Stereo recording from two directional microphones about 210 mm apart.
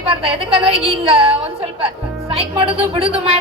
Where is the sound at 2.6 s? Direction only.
25° right (ahead or behind).